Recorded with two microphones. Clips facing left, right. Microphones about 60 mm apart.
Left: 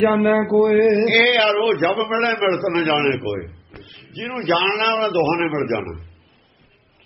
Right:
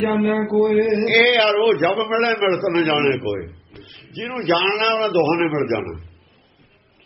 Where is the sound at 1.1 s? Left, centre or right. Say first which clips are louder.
Right 1 dB; centre.